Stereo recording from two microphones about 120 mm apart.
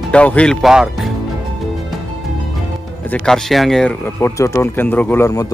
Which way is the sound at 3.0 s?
10° left (ahead or behind).